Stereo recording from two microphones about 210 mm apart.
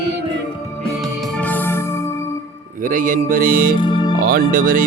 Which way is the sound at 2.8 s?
40° right (ahead or behind).